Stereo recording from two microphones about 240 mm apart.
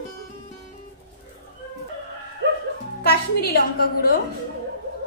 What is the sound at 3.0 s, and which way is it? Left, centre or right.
A woman's voice, left.